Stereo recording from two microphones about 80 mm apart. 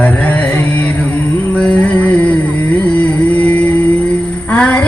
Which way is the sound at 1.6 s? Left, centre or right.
Centre.